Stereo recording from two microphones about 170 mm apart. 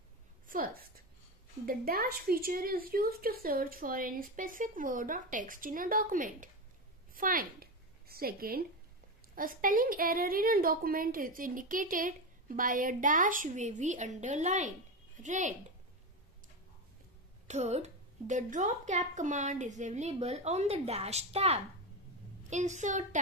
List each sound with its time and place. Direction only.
0.5 s a woman's voice: 55° right (ahead or behind)
17.5 s a woman's voice: 40° right (ahead or behind)